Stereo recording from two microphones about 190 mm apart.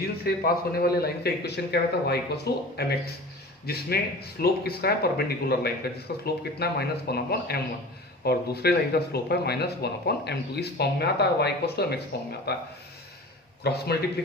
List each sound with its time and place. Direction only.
0.3 s speech: 55° left (ahead or behind)
13.7 s speech: 60° left (ahead or behind)